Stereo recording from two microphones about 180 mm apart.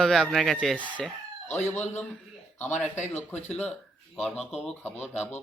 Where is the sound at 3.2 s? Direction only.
5° left (ahead or behind).